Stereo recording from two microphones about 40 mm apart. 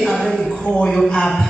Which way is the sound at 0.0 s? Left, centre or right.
Centre.